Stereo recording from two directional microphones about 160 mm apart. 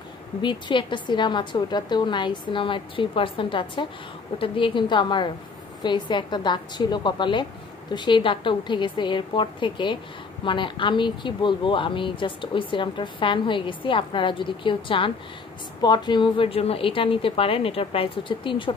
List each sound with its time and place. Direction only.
0.4 s a woman's voice: 30° left (ahead or behind)